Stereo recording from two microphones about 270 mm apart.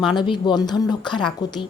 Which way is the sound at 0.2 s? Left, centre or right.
Centre.